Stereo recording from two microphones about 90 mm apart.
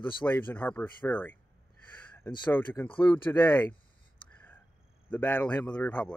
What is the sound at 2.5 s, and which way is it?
Mantra, 20° left (ahead or behind).